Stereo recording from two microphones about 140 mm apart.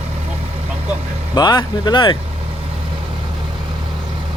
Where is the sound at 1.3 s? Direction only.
30° left (ahead or behind).